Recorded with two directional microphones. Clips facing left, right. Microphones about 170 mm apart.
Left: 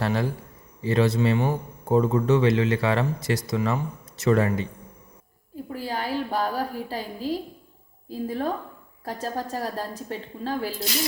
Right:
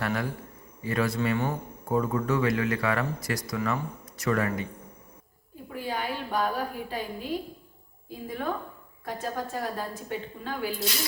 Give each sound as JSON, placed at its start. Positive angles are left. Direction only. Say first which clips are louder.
{"t": 0.0, "sound": "speech", "louder": "left 4 dB", "side_deg": 30}
{"t": 5.7, "sound": "a woman's voice", "louder": "left 3 dB", "side_deg": 35}